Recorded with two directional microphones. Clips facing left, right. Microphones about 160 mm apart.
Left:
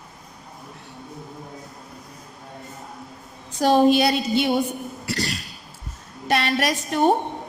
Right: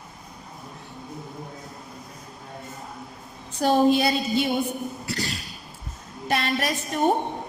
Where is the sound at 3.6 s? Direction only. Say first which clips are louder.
Left 3 dB; 85° left.